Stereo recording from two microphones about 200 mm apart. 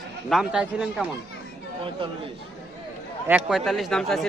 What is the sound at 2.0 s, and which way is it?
Speech, 25° right (ahead or behind).